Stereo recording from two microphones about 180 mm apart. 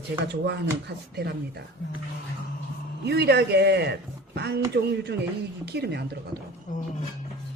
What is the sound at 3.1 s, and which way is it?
Speech, 70° right (ahead or behind).